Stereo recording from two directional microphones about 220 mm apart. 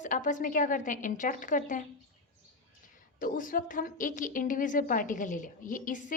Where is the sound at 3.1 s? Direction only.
40° left (ahead or behind).